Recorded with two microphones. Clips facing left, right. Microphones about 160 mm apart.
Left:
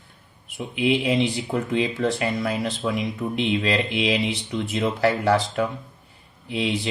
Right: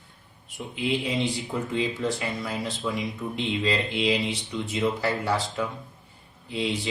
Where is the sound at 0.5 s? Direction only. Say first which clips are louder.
Left 6 dB; 70° left (ahead or behind).